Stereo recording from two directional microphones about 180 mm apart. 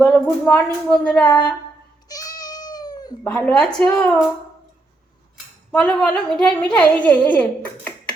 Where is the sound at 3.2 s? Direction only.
5° left (ahead or behind).